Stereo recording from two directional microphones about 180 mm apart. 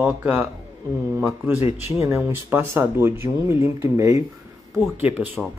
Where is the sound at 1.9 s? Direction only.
15° right (ahead or behind).